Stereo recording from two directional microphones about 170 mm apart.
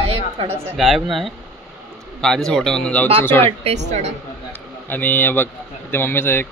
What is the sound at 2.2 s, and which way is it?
A man's voice, 5° left (ahead or behind).